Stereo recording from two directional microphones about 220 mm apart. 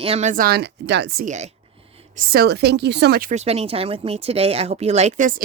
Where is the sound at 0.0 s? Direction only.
30° right (ahead or behind).